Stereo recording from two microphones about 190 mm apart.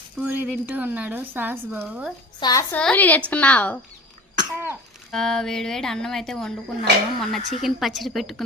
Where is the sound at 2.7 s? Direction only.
5° left (ahead or behind).